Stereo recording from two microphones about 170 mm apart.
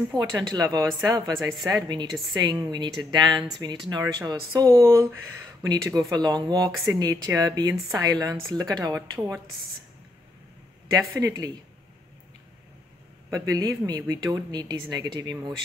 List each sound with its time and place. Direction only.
0.1 s speech: 20° right (ahead or behind)
2.0 s a woman's voice: centre (ahead or behind)
2.4 s speech: 25° right (ahead or behind)
10.9 s speech: 20° right (ahead or behind)
13.3 s speech: 20° right (ahead or behind)